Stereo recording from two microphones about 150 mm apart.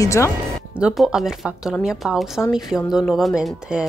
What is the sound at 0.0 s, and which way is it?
Speech, 20° left (ahead or behind).